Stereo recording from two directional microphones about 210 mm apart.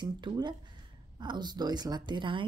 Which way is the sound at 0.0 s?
20° right (ahead or behind).